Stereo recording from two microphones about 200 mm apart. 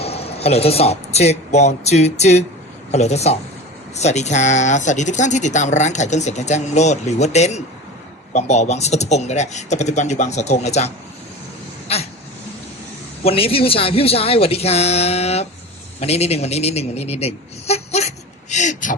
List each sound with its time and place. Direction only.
0.0 s speech: 30° left (ahead or behind)
13.2 s a woman's voice: 30° left (ahead or behind)